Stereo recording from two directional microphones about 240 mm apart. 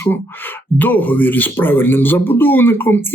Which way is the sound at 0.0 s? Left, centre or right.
Centre.